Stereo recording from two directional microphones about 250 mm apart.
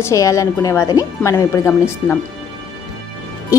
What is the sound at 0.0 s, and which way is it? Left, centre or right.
A woman's voice, centre.